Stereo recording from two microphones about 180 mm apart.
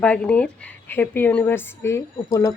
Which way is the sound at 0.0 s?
5° left (ahead or behind).